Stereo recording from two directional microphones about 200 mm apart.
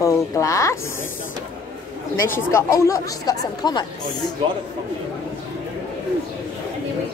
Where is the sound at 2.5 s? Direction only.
15° left (ahead or behind).